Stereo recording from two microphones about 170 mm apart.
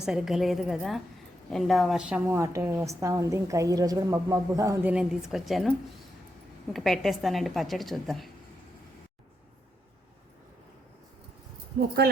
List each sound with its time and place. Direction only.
0.0 s a woman's voice: 5° right (ahead or behind)
6.7 s a woman's voice: centre (ahead or behind)